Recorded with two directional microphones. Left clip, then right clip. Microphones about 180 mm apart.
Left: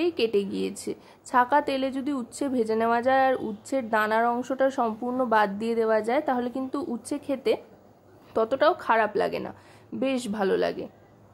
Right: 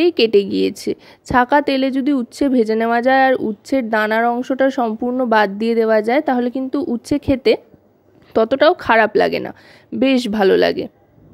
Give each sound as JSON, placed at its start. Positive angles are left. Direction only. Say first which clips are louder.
{"t": 0.0, "sound": "a woman's voice", "louder": "right 11 dB", "side_deg": -40}